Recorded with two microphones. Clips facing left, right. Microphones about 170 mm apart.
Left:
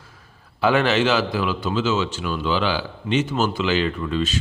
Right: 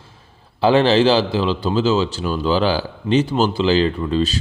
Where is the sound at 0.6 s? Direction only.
30° right (ahead or behind).